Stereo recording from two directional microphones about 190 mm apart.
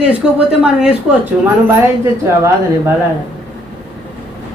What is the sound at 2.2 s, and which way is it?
Speech, 15° right (ahead or behind).